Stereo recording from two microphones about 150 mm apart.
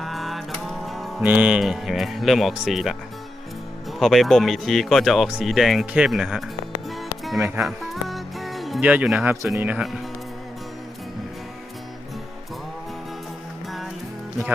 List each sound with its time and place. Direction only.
0.0 s music: centre (ahead or behind)
1.2 s speech: 10° right (ahead or behind)
4.0 s speech: centre (ahead or behind)
7.3 s speech: 15° right (ahead or behind)
7.6 s music: centre (ahead or behind)
9.6 s speech: 10° right (ahead or behind)